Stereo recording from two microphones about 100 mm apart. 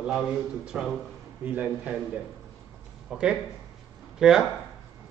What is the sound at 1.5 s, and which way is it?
Speech, 15° right (ahead or behind).